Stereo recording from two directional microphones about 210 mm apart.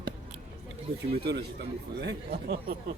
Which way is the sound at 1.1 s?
50° right (ahead or behind).